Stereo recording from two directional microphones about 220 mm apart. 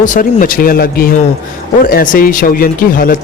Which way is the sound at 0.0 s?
35° left (ahead or behind).